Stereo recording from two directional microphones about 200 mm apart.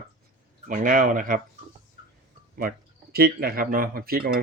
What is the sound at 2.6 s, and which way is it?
Speech, 50° right (ahead or behind).